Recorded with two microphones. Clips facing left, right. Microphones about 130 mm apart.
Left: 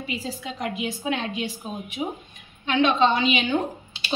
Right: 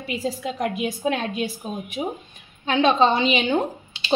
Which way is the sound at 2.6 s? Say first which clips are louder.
Right 2 dB; 35° right (ahead or behind).